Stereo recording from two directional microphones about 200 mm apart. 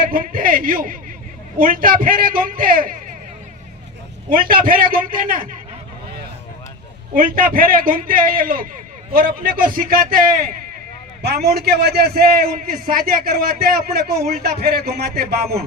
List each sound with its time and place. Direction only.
0.0 s a man's voice: 45° right (ahead or behind)
4.3 s a man's voice: 45° right (ahead or behind)
7.1 s a man's voice: 45° right (ahead or behind)
11.4 s a man's voice: 50° right (ahead or behind)